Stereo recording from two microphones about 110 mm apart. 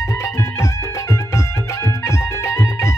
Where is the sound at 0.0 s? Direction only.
25° left (ahead or behind).